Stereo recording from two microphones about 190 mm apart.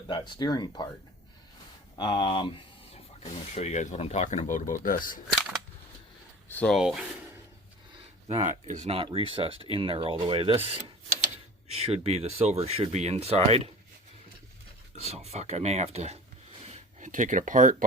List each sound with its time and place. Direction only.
0.1 s speech: 20° left (ahead or behind)
2.0 s speech: 25° left (ahead or behind); by 5.2 s 45° left (ahead or behind)
6.5 s speech: 10° left (ahead or behind)
6.7 s speech: 5° right (ahead or behind)
8.4 s speech: 40° right (ahead or behind)
15.0 s speech: 35° right (ahead or behind)